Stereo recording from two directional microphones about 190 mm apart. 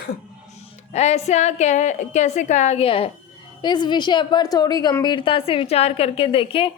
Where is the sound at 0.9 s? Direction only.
35° left (ahead or behind).